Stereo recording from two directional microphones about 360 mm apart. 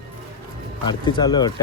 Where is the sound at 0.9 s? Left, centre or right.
Centre.